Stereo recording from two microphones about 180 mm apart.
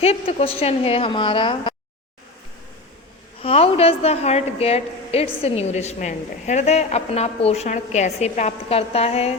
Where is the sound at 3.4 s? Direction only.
30° left (ahead or behind).